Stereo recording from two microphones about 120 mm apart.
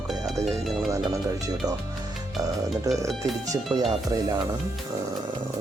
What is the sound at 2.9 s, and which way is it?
Speech, 30° right (ahead or behind).